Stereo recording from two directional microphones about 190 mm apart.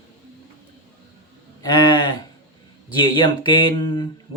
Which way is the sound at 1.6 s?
20° left (ahead or behind).